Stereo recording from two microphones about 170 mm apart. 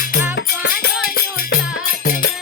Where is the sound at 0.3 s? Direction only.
90° left.